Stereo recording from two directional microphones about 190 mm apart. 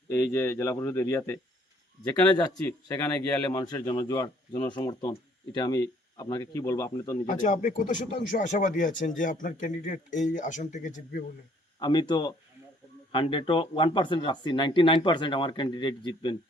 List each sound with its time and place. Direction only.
0.1 s speech: 15° left (ahead or behind)
7.3 s speech: 40° left (ahead or behind)
11.8 s speech: 25° left (ahead or behind)